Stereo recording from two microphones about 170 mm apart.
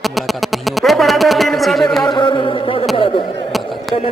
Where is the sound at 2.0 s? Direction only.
25° left (ahead or behind).